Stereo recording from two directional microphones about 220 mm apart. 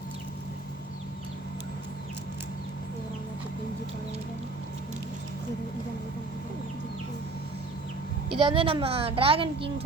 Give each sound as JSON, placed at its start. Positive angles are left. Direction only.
{"t": 8.3, "sound": "a woman's voice", "side_deg": -25}